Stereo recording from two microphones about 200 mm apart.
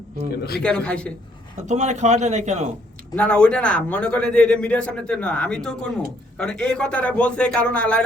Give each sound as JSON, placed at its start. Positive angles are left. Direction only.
{"t": 0.6, "sound": "a man's voice", "side_deg": 5}
{"t": 1.6, "sound": "speech", "side_deg": -35}
{"t": 3.2, "sound": "a man's voice", "side_deg": 5}